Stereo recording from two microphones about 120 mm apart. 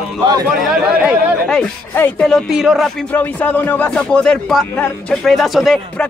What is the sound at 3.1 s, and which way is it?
Speech, 15° left (ahead or behind).